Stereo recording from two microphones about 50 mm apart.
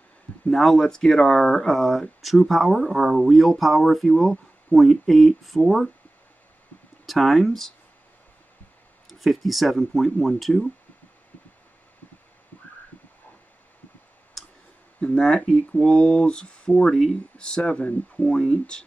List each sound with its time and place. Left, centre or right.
0.5 s speech: centre
7.1 s speech: centre
9.2 s speech: centre
14.4 s clicking: centre
15.0 s speech: centre
16.9 s speech: centre
17.4 s speech: centre
18.4 s speech: centre